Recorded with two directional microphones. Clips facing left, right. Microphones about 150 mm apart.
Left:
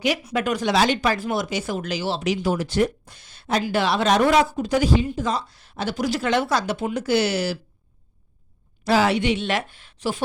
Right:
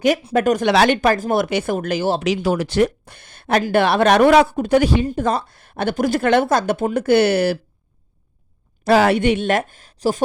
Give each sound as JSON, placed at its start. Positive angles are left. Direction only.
{"t": 0.3, "sound": "speech", "side_deg": -45}
{"t": 0.6, "sound": "speech", "side_deg": -65}
{"t": 2.2, "sound": "speech", "side_deg": -80}
{"t": 8.8, "sound": "speech", "side_deg": -55}